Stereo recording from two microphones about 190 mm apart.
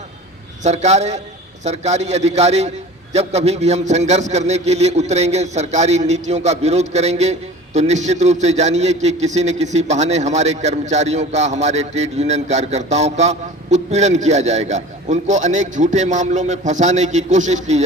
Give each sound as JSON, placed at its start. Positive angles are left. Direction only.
{"t": 0.6, "sound": "a man's voice", "side_deg": -35}